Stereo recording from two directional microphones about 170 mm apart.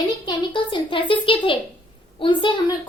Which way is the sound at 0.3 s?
30° left (ahead or behind).